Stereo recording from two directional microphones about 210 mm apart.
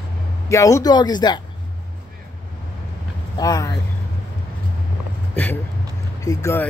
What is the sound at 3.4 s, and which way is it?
Speech, 20° left (ahead or behind).